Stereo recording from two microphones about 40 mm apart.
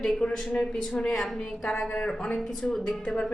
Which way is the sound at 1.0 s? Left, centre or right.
Centre.